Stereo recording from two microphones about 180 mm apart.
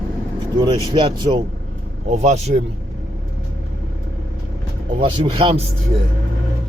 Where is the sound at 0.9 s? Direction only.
25° right (ahead or behind).